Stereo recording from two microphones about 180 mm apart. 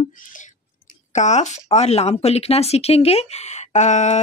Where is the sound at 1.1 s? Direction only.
40° left (ahead or behind).